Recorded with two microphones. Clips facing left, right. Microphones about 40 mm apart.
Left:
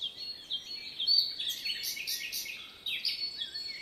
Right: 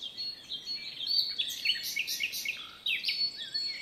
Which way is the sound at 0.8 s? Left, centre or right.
Right.